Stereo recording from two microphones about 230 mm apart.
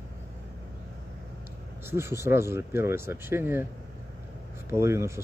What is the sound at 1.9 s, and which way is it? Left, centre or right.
Speech, centre.